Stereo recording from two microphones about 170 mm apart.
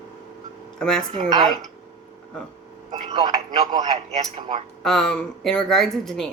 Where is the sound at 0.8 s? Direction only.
5° left (ahead or behind).